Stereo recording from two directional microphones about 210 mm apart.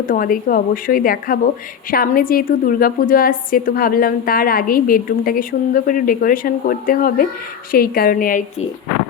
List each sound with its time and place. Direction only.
0.1 s a woman's voice: 40° left (ahead or behind)